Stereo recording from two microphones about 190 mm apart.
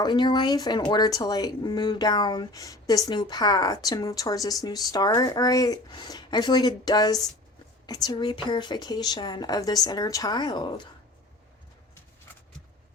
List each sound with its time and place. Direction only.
0.0 s speech: 25° left (ahead or behind)